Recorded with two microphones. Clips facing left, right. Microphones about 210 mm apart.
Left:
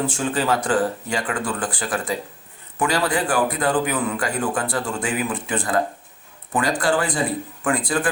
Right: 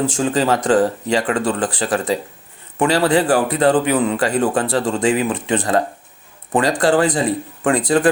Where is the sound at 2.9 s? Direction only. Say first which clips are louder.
Right 7 dB; 35° right (ahead or behind).